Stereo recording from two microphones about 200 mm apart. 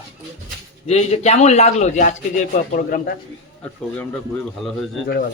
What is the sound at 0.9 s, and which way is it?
A man's voice, 35° left (ahead or behind).